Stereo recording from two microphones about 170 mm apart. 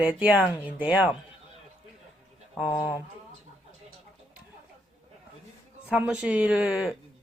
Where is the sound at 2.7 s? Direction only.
20° left (ahead or behind).